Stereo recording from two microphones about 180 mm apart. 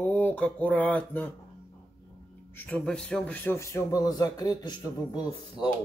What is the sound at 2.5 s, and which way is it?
A man's voice, 5° left (ahead or behind).